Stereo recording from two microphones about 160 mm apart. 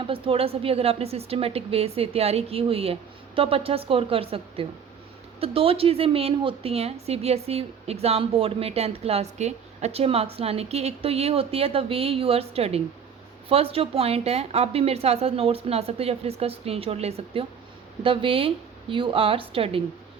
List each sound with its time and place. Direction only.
0.0 s a woman's voice: 35° right (ahead or behind)